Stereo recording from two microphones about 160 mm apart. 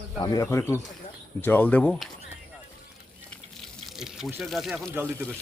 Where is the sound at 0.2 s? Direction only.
25° left (ahead or behind).